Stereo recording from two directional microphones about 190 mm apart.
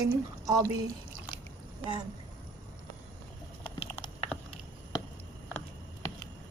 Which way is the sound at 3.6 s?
30° left (ahead or behind).